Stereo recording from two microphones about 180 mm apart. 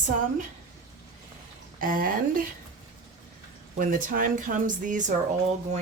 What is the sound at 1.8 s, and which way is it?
Speech, 50° right (ahead or behind).